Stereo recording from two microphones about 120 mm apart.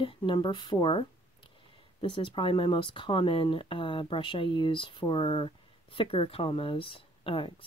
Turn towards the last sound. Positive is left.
turn(degrees=45)  # may be behind; listen again after turning